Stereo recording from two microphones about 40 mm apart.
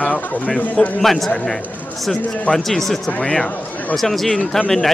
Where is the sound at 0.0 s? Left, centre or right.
Left.